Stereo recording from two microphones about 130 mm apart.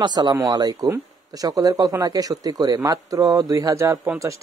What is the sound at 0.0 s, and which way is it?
A man's voice, 35° right (ahead or behind).